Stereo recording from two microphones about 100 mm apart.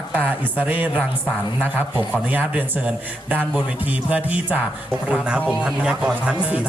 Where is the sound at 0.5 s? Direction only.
15° right (ahead or behind).